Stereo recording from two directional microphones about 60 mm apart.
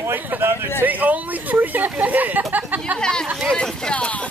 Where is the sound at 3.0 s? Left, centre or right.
Centre.